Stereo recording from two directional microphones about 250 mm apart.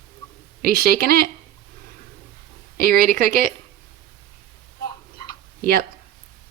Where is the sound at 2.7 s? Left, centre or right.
Right.